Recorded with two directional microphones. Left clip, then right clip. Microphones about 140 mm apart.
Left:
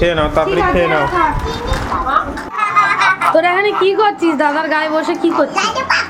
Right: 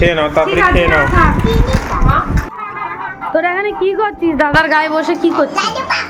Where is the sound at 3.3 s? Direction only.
20° left (ahead or behind).